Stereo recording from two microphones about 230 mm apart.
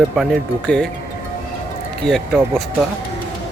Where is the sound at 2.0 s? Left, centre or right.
Centre.